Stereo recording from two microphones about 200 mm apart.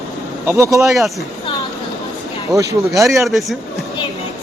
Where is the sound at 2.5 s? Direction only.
15° right (ahead or behind).